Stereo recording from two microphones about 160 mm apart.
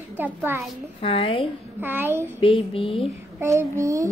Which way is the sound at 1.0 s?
35° left (ahead or behind).